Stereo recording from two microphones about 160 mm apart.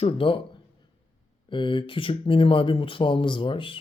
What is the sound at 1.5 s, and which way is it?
Speech, 30° left (ahead or behind).